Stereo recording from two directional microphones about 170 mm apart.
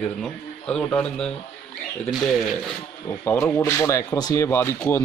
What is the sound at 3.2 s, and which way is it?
Speech, 10° left (ahead or behind).